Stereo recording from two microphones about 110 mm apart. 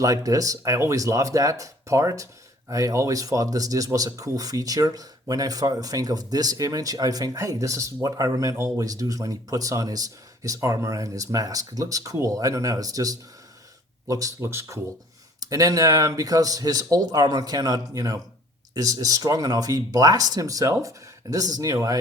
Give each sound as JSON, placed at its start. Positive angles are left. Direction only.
{"t": 0.0, "sound": "speech", "side_deg": -30}